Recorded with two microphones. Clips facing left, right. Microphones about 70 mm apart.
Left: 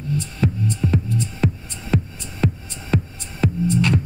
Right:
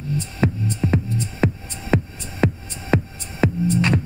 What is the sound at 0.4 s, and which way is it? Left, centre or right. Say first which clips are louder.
Music: right 1 dB; right.